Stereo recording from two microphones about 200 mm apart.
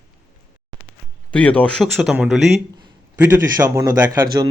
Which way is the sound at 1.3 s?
5° left (ahead or behind).